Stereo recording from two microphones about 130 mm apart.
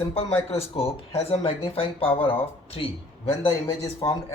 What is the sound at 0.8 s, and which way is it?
Speech, 50° left (ahead or behind).